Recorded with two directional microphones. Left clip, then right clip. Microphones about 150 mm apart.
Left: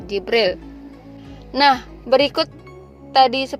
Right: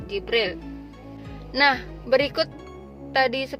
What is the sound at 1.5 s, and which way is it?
A woman's voice, 25° left (ahead or behind).